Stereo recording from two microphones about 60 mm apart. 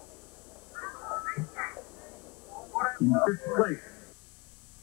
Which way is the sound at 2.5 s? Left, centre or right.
Centre.